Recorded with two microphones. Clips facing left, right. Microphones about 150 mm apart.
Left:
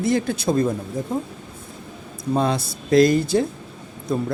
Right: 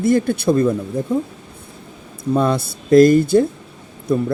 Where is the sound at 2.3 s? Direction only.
55° right (ahead or behind).